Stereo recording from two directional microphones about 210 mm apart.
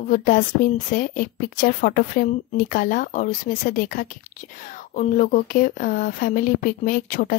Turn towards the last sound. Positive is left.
turn(degrees=40)  # may be behind; listen again after turning